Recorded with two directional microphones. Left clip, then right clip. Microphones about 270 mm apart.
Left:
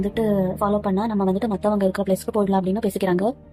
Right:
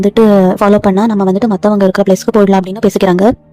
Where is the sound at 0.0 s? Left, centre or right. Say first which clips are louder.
Right 14 dB; right.